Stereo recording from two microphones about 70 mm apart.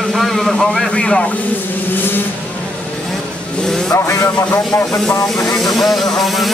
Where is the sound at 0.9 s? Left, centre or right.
Centre.